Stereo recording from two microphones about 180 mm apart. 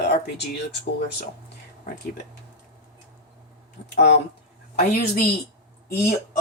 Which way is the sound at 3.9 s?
70° left (ahead or behind).